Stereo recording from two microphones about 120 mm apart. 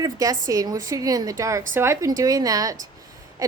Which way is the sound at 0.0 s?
30° right (ahead or behind).